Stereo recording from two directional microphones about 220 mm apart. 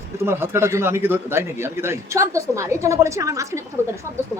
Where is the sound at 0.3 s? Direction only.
10° right (ahead or behind).